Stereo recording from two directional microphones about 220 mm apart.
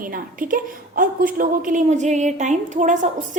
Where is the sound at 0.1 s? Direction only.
40° right (ahead or behind).